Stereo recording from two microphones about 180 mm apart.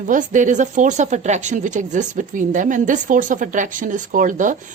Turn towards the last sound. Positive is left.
turn(degrees=-45)  # may be behind; listen again after turning